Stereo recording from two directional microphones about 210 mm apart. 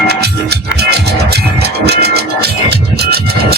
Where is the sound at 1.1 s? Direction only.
50° right (ahead or behind).